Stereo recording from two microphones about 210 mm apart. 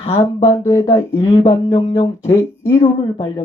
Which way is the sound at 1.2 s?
30° left (ahead or behind).